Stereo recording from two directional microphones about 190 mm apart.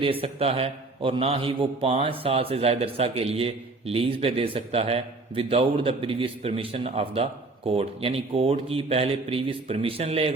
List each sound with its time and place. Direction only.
0.0 s a man's voice: 30° right (ahead or behind)